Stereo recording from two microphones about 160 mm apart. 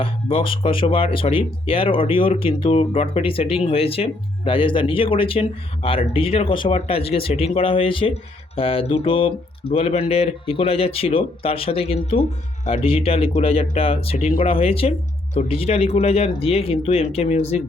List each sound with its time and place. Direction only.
0.0 s speech: 35° left (ahead or behind)
14.3 s speech: 60° left (ahead or behind)
14.5 s speech: 35° left (ahead or behind)